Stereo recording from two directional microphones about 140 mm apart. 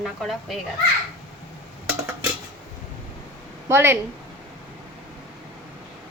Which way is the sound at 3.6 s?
15° right (ahead or behind).